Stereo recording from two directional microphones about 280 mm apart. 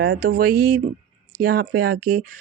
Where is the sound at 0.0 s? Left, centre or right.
Right.